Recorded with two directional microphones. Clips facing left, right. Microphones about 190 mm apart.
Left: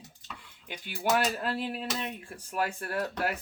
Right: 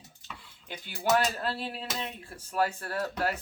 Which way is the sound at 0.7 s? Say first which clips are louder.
Right 1 dB; 15° left (ahead or behind).